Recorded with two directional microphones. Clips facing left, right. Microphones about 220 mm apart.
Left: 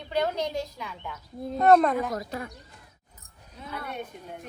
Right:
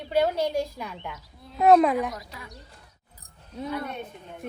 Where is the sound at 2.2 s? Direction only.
50° left (ahead or behind).